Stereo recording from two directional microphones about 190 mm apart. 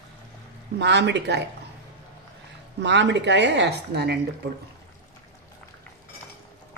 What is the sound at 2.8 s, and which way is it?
A man's voice, 70° right (ahead or behind).